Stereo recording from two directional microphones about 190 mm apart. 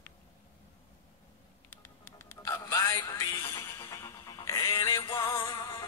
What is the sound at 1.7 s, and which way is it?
Music, 10° left (ahead or behind).